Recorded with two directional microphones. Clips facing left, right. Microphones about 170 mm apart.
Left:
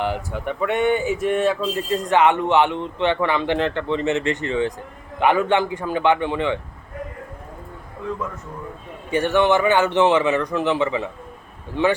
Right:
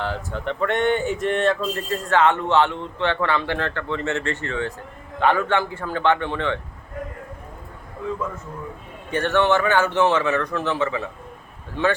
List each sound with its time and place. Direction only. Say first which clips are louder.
0.0 s speech: left 2 dB; 15° left (ahead or behind)
9.0 s speech: left 2 dB; 10° left (ahead or behind)